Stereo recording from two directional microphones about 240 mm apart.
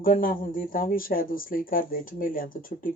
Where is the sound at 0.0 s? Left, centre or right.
Left.